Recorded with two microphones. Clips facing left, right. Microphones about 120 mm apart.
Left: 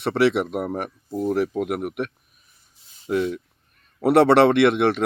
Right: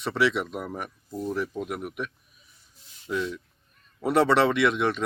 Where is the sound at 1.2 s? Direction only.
70° left (ahead or behind).